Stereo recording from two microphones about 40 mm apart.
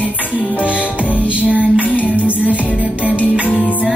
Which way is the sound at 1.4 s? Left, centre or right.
Right.